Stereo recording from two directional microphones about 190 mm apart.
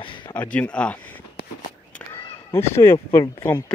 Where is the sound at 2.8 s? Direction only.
15° left (ahead or behind).